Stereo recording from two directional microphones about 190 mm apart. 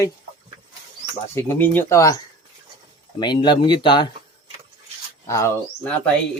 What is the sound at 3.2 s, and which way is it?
Speech, 25° left (ahead or behind).